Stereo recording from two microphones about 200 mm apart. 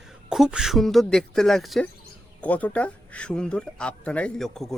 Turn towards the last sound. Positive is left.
turn(degrees=0)  # may be behind; listen again after turning